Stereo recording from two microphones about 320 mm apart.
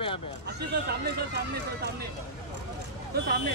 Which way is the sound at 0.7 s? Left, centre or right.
Right.